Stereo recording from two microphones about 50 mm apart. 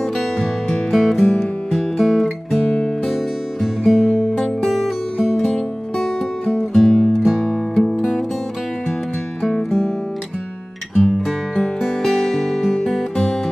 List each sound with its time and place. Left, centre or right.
0.7 s music: centre
3.6 s music: centre
6.5 s music: centre
7.9 s music: centre
9.4 s music: centre
11.0 s music: centre